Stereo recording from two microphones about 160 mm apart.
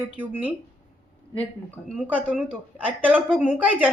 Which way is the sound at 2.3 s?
10° right (ahead or behind).